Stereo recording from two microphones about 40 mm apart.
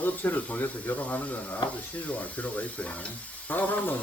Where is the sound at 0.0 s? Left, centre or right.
Left.